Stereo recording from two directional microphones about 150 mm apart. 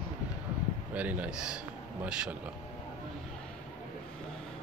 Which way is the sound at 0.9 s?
10° right (ahead or behind).